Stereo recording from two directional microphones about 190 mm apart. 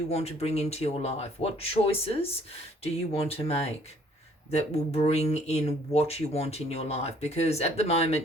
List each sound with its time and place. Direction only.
0.1 s speech: 35° left (ahead or behind)